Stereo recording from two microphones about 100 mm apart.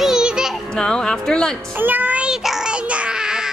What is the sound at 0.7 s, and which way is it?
Speech, 10° left (ahead or behind).